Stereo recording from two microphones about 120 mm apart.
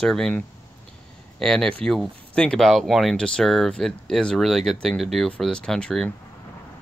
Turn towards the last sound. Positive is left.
turn(degrees=5)  # may be behind; listen again after turning